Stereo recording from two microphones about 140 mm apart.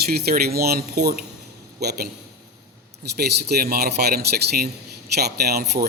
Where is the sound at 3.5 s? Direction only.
90° right.